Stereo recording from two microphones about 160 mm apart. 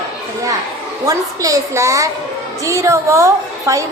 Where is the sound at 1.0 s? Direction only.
20° right (ahead or behind).